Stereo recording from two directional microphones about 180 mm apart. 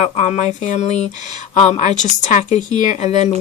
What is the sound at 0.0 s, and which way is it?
Speech, 40° left (ahead or behind).